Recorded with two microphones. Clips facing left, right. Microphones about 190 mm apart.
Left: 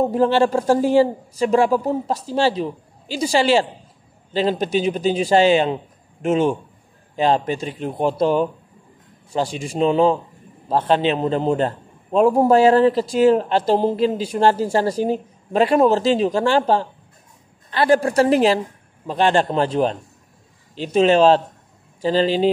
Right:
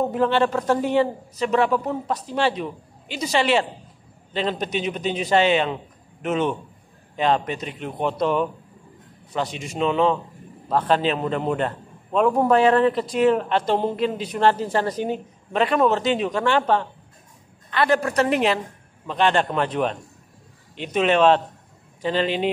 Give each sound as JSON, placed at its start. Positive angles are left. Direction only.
{"t": 0.0, "sound": "a man's voice", "side_deg": 30}